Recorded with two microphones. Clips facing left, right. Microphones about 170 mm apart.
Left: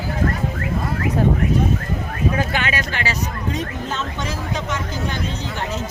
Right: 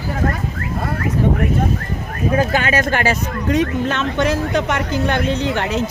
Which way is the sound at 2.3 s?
45° right (ahead or behind).